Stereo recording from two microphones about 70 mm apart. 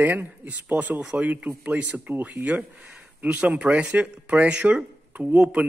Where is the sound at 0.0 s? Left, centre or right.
Right.